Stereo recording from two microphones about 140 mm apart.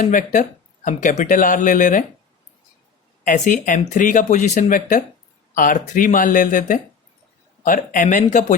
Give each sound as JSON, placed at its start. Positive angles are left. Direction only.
{"t": 0.0, "sound": "speech", "side_deg": 70}
{"t": 3.2, "sound": "speech", "side_deg": 65}